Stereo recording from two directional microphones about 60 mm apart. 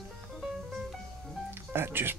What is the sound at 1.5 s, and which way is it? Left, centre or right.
Music, right.